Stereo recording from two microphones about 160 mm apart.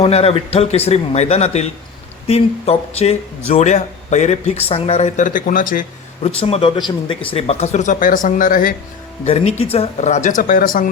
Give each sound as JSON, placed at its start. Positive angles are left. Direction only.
{"t": 0.0, "sound": "speech", "side_deg": 40}
{"t": 6.2, "sound": "speech", "side_deg": 40}
{"t": 9.2, "sound": "speech", "side_deg": 40}